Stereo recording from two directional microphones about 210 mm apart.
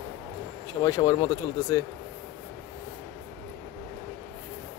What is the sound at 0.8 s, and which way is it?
Speech, 15° left (ahead or behind).